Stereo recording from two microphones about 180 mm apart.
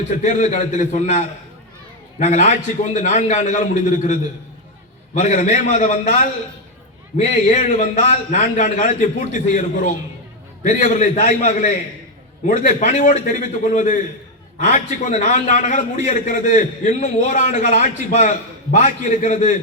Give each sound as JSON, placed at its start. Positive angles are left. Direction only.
{"t": 0.1, "sound": "a man's voice", "side_deg": 45}
{"t": 5.2, "sound": "a man's voice", "side_deg": 40}
{"t": 7.4, "sound": "a man's voice", "side_deg": 45}